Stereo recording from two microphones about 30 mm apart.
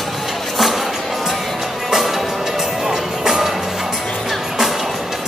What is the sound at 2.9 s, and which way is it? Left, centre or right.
Music, centre.